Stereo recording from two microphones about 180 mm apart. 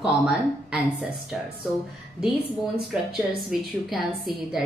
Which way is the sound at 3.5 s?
Centre (ahead or behind).